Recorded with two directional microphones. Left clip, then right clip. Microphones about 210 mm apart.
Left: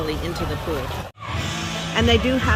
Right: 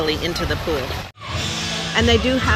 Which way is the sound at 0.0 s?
5° left (ahead or behind).